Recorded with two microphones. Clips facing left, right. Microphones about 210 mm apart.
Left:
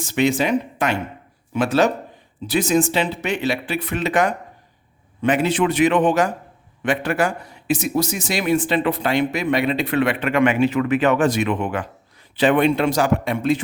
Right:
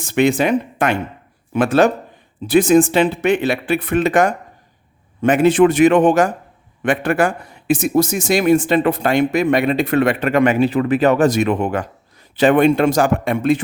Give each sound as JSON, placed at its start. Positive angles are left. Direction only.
{"t": 0.0, "sound": "a man's voice", "side_deg": -55}